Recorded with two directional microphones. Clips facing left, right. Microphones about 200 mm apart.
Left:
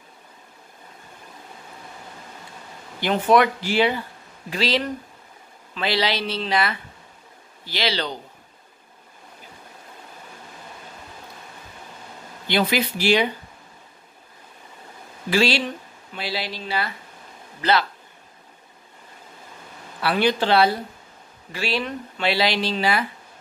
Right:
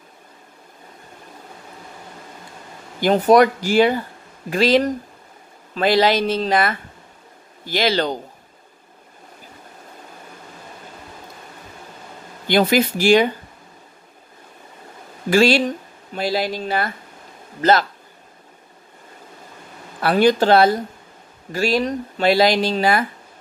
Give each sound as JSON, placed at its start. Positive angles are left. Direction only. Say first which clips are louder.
{"t": 3.0, "sound": "speech", "louder": "right 5 dB", "side_deg": -40}
{"t": 12.4, "sound": "speech", "louder": "right 6 dB", "side_deg": -45}
{"t": 15.2, "sound": "speech", "louder": "right 6 dB", "side_deg": -45}
{"t": 20.0, "sound": "speech", "louder": "right 6 dB", "side_deg": -45}